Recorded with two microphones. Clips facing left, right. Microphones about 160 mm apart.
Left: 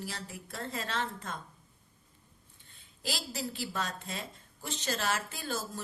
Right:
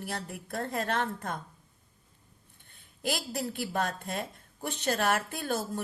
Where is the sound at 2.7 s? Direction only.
55° right (ahead or behind).